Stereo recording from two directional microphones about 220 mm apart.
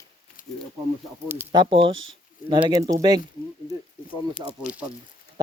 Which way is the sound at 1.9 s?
60° right (ahead or behind).